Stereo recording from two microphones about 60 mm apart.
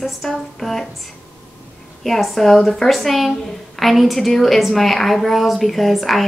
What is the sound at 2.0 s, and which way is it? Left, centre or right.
A woman's voice, centre.